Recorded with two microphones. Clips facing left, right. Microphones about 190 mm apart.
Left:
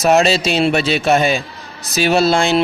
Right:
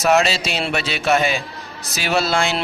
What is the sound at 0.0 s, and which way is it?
A man's voice, 30° left (ahead or behind).